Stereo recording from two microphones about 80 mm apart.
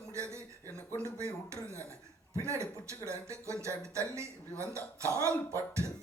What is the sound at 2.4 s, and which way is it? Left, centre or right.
Speech, right.